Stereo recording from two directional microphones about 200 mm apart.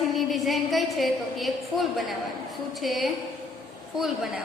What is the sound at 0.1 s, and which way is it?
A woman's voice, centre (ahead or behind).